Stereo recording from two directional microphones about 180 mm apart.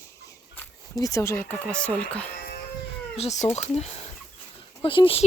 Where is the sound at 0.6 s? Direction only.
20° left (ahead or behind).